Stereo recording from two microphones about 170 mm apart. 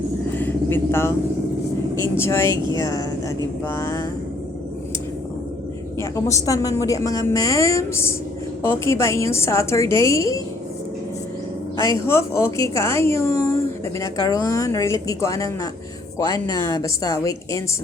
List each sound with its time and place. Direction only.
0.3 s vehicle: 10° left (ahead or behind)
2.0 s a woman's voice: 15° left (ahead or behind)
6.0 s a woman's voice: 20° left (ahead or behind)
11.8 s a woman's voice: 15° left (ahead or behind)